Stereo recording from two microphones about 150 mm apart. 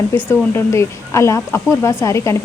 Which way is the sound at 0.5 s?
20° left (ahead or behind).